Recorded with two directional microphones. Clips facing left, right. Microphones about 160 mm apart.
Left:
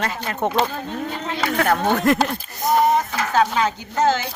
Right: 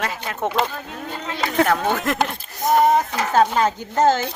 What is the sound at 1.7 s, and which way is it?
Speech, centre (ahead or behind).